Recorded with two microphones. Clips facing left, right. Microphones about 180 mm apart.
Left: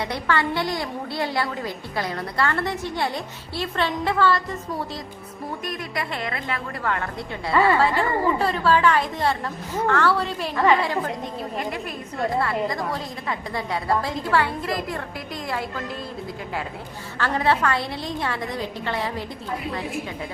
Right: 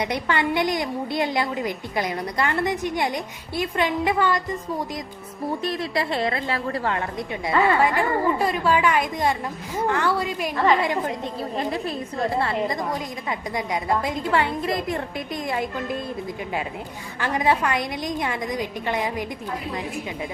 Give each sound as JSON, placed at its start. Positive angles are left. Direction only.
{"t": 0.0, "sound": "a woman's voice", "side_deg": -20}
{"t": 5.6, "sound": "a woman's voice", "side_deg": -30}
{"t": 7.4, "sound": "a woman's voice", "side_deg": -15}
{"t": 11.5, "sound": "a woman's voice", "side_deg": -30}
{"t": 17.2, "sound": "a woman's voice", "side_deg": -15}